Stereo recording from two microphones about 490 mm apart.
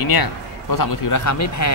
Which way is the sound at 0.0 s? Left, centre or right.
Left.